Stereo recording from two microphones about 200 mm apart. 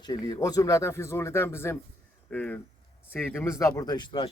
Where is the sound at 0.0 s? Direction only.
20° left (ahead or behind).